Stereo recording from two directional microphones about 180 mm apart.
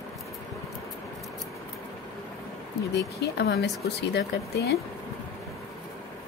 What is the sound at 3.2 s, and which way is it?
A woman's voice, 65° left (ahead or behind).